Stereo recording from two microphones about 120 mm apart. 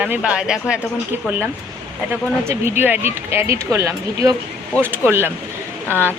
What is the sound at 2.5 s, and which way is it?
Speech, 20° right (ahead or behind).